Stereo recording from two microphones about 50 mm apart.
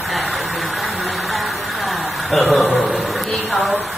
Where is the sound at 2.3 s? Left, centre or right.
Centre.